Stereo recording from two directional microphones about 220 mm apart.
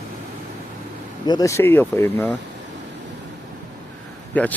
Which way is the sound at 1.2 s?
15° left (ahead or behind).